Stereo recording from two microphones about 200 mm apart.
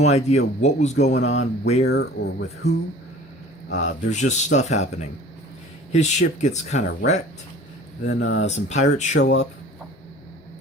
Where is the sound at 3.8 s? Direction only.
35° left (ahead or behind).